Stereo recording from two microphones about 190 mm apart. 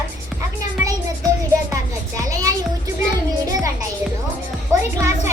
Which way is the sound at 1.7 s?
15° right (ahead or behind).